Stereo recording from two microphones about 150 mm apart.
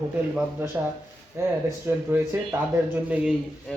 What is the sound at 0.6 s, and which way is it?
Speech, 15° right (ahead or behind).